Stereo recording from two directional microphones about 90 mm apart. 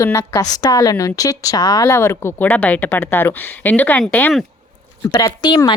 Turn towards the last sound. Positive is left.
turn(degrees=55)  # may be behind; listen again after turning